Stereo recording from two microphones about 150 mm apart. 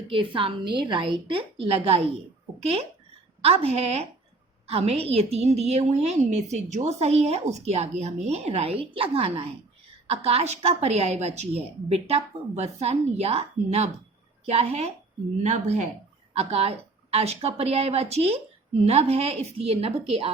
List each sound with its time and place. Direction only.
0.1 s a woman's voice: 35° right (ahead or behind)